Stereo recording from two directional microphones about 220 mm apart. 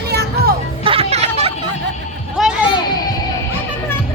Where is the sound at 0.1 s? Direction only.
45° right (ahead or behind).